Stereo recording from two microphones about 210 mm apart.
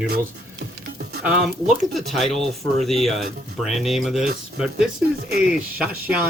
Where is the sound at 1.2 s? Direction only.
5° right (ahead or behind).